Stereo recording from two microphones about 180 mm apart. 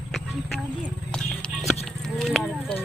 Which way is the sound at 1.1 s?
5° left (ahead or behind).